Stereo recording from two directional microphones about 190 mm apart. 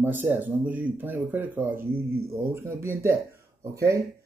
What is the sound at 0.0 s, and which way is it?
Speech, 10° right (ahead or behind).